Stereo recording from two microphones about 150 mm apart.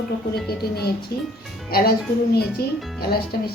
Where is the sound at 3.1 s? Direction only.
90° left.